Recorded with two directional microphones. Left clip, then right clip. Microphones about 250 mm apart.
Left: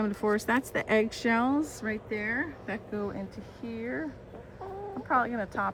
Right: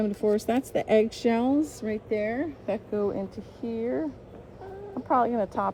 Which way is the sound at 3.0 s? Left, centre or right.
Left.